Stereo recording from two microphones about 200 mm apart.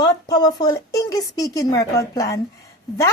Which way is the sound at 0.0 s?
20° left (ahead or behind).